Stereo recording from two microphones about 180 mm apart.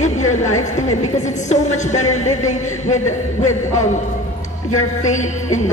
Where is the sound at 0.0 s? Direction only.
40° left (ahead or behind).